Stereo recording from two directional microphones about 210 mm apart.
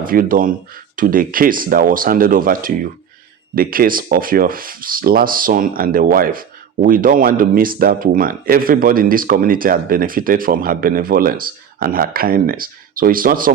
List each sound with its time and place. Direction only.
0.0 s speech: 40° right (ahead or behind)